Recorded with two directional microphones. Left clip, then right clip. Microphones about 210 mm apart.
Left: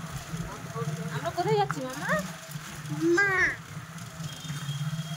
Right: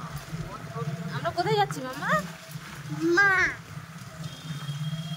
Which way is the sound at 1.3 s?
30° right (ahead or behind).